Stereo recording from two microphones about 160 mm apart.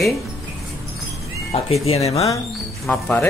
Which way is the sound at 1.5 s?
40° left (ahead or behind).